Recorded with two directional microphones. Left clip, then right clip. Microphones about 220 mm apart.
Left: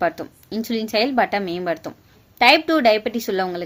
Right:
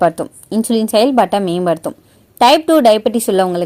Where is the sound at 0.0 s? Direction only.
25° right (ahead or behind).